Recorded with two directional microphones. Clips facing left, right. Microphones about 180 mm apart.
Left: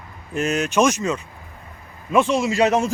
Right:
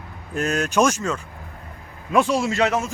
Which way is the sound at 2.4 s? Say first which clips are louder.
Left 2 dB; 10° left (ahead or behind).